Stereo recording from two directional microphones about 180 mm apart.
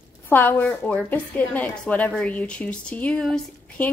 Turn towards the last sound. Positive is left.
turn(degrees=5)  # may be behind; listen again after turning